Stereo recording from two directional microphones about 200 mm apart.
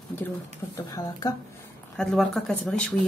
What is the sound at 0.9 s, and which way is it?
Speech, 20° left (ahead or behind).